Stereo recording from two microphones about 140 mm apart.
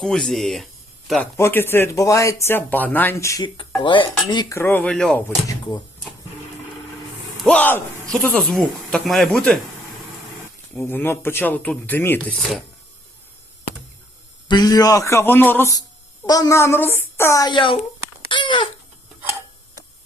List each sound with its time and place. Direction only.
0.0 s speech: 5° left (ahead or behind)
1.4 s speech: 15° left (ahead or behind)
3.8 s cutlery: 35° left (ahead or behind)
4.4 s speech: 15° left (ahead or behind)
5.5 s speech: 30° left (ahead or behind)
7.4 s speech: 10° left (ahead or behind)
10.8 s speech: 15° left (ahead or behind)
14.4 s a woman's voice: 30° left (ahead or behind)
16.2 s a woman's voice: 25° left (ahead or behind)
18.3 s a sound: 35° left (ahead or behind)